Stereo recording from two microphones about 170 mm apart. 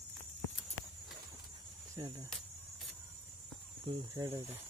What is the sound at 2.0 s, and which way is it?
Speech, 20° right (ahead or behind).